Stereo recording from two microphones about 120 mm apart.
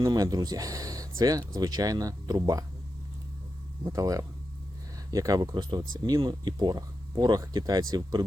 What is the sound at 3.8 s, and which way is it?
Speech, 25° right (ahead or behind).